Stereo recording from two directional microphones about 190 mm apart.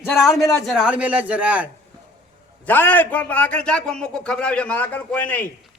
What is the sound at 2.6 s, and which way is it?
Speech, 10° left (ahead or behind).